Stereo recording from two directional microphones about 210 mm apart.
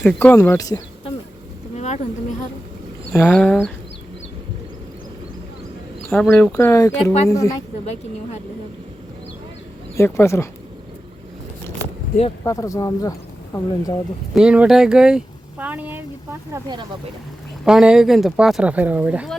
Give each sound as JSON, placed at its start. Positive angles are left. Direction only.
{"t": 0.0, "sound": "speech", "side_deg": 10}
{"t": 1.7, "sound": "a sound", "side_deg": 35}
{"t": 3.2, "sound": "speech", "side_deg": 5}
{"t": 6.1, "sound": "speech", "side_deg": 0}
{"t": 9.9, "sound": "speech", "side_deg": 15}
{"t": 12.5, "sound": "speech", "side_deg": 15}
{"t": 14.3, "sound": "speech", "side_deg": -5}
{"t": 17.7, "sound": "speech", "side_deg": -5}